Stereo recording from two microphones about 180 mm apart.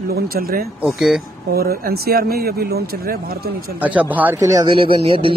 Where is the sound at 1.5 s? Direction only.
60° right (ahead or behind).